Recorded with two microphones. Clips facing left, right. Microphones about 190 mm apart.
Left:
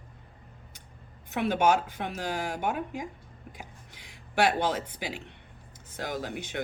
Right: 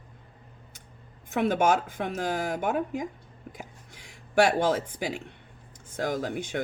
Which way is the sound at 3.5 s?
45° right (ahead or behind).